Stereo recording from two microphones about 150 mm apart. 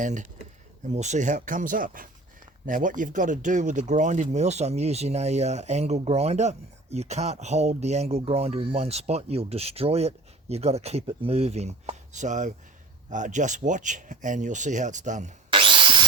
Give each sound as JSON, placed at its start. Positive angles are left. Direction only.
{"t": 0.0, "sound": "speech", "side_deg": -55}
{"t": 15.5, "sound": "wood", "side_deg": -35}